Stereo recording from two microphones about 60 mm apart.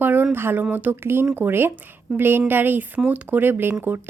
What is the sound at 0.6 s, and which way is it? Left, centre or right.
Speech, right.